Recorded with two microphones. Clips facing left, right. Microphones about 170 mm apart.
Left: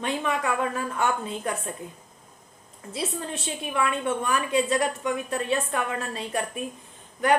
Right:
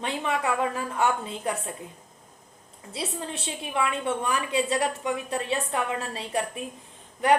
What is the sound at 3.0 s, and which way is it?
A woman's voice, 25° right (ahead or behind).